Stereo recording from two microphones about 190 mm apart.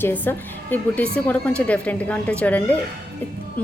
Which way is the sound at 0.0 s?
10° left (ahead or behind).